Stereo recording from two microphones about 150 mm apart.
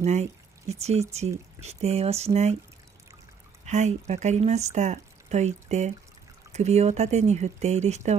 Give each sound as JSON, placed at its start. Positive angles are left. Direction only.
{"t": 0.0, "sound": "speech", "side_deg": -50}
{"t": 3.6, "sound": "speech", "side_deg": -50}